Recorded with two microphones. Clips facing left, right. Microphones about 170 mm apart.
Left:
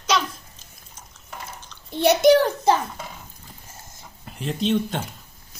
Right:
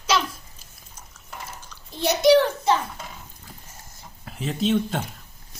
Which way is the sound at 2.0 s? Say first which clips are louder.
Left 2 dB; 55° left (ahead or behind).